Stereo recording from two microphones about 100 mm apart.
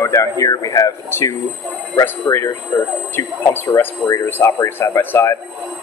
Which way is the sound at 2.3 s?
20° left (ahead or behind).